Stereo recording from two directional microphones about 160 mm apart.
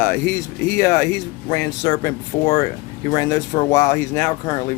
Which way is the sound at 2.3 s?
20° left (ahead or behind).